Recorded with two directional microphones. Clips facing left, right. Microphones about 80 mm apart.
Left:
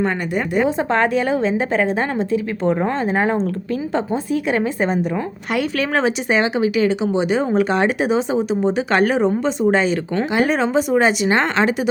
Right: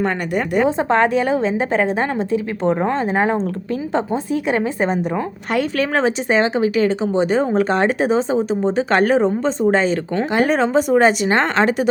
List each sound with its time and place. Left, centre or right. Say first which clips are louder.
0.0 s speech: even; right
0.6 s a woman's voice: right 2 dB; right
5.5 s speech: right 1 dB; right